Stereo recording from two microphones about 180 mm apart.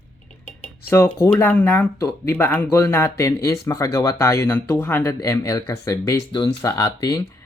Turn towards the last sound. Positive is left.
turn(degrees=20)  # may be behind; listen again after turning